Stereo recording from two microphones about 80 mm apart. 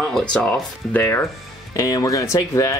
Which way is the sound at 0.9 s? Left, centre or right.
Left.